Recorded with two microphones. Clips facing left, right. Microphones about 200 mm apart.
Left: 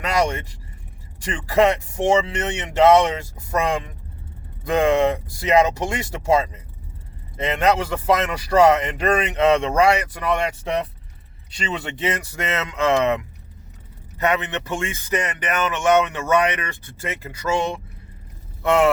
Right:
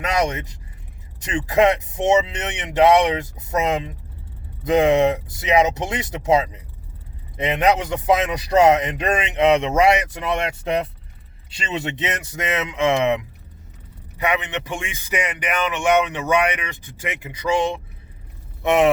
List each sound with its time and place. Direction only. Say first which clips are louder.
0.0 s vehicle: even; 20° right (ahead or behind)
1.2 s speech: right 1 dB; 20° right (ahead or behind)
11.7 s speech: even; 20° right (ahead or behind)
18.6 s speech: right 1 dB; 20° right (ahead or behind)